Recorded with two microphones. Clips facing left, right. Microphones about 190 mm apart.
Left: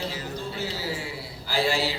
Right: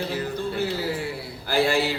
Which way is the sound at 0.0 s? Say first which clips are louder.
Right 5 dB; 55° right (ahead or behind).